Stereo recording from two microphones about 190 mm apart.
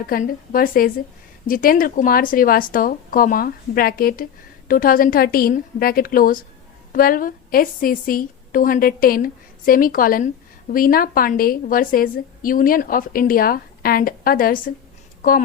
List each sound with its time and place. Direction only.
0.1 s a woman's voice: 50° left (ahead or behind)